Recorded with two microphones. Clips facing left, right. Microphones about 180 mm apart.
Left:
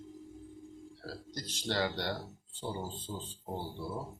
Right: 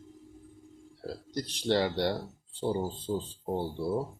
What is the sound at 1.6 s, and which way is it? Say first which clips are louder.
Speech: right 6 dB; 25° right (ahead or behind).